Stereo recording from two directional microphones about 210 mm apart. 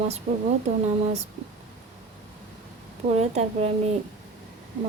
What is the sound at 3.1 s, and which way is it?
Speech, 30° right (ahead or behind).